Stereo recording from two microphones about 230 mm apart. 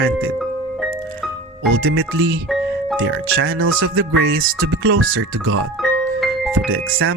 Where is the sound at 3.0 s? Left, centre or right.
Right.